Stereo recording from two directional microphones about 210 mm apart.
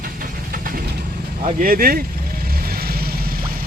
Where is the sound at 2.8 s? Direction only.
45° right (ahead or behind).